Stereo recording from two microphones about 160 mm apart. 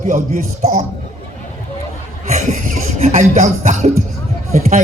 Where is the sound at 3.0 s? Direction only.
45° right (ahead or behind).